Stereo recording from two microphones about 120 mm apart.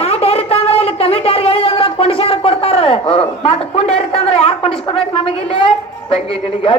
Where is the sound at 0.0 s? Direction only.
60° left (ahead or behind).